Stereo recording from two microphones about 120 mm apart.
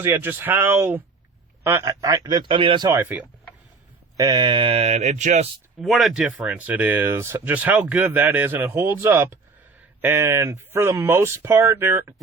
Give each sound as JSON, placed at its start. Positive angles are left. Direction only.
{"t": 0.0, "sound": "a man's voice", "side_deg": -15}
{"t": 2.9, "sound": "speech", "side_deg": -15}
{"t": 4.2, "sound": "speech", "side_deg": -35}
{"t": 5.8, "sound": "speech", "side_deg": 0}